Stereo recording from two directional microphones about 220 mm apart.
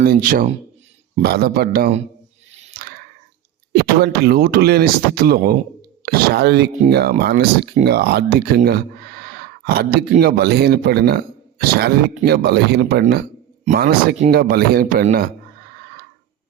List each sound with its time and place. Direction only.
0.0 s a man's voice: 40° right (ahead or behind)
2.5 s a sound: 30° right (ahead or behind)
4.0 s a man's voice: 45° right (ahead or behind)